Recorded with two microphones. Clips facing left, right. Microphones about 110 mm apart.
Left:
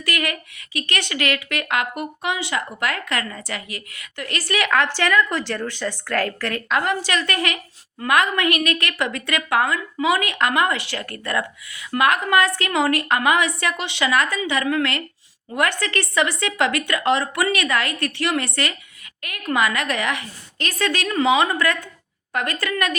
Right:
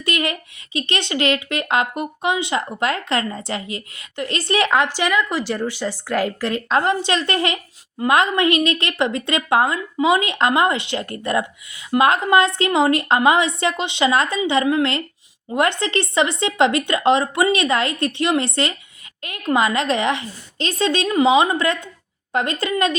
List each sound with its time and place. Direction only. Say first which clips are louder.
0.0 s a woman's voice: right 3 dB; 25° right (ahead or behind)
6.7 s a woman's voice: right 3 dB; 25° right (ahead or behind)